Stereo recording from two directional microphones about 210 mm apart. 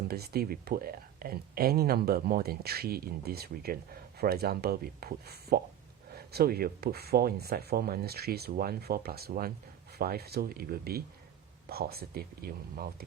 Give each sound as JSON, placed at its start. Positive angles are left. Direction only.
{"t": 0.1, "sound": "speech", "side_deg": -45}